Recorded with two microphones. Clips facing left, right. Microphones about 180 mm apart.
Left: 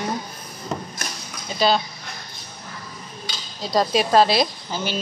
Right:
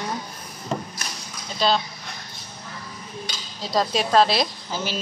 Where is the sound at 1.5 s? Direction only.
5° left (ahead or behind).